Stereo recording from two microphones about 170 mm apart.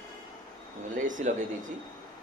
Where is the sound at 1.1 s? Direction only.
50° right (ahead or behind).